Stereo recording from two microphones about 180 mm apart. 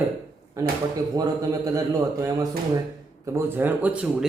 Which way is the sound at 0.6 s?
20° right (ahead or behind).